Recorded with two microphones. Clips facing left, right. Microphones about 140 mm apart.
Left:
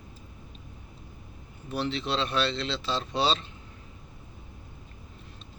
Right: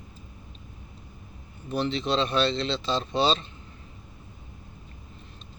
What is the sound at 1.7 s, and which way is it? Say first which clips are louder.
Speech: right 3 dB; 5° left (ahead or behind).